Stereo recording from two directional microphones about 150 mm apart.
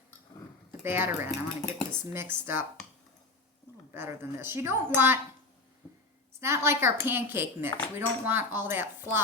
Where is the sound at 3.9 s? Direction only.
15° right (ahead or behind).